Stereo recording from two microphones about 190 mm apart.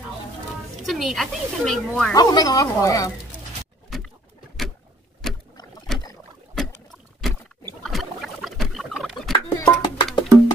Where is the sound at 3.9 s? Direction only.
Centre (ahead or behind).